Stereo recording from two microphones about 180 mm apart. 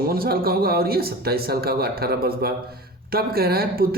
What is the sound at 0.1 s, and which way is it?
Speech, 55° right (ahead or behind).